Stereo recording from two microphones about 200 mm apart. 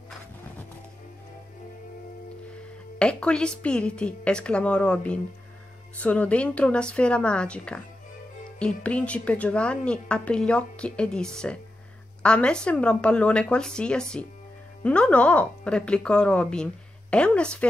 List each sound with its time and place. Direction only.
3.0 s a woman's voice: 5° left (ahead or behind)